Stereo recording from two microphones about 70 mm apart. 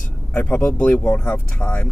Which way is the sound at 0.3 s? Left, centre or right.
Left.